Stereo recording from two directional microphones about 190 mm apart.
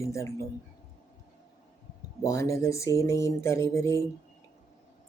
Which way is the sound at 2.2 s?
15° left (ahead or behind).